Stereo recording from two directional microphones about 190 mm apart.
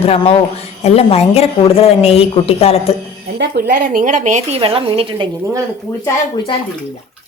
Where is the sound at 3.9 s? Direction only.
40° right (ahead or behind).